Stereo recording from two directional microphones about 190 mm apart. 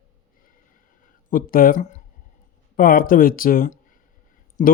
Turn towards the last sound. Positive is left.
turn(degrees=45)  # may be behind; listen again after turning